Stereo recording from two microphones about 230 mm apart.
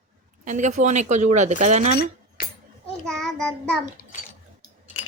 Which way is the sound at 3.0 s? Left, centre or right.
Centre.